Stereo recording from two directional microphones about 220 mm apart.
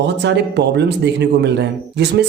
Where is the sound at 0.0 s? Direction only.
50° right (ahead or behind).